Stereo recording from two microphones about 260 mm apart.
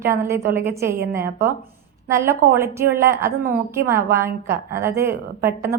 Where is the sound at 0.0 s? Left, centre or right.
Centre.